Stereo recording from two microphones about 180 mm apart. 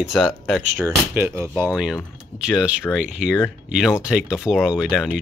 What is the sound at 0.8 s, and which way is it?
Speech, 15° right (ahead or behind).